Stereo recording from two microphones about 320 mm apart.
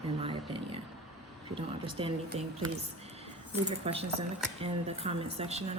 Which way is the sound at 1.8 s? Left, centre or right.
Centre.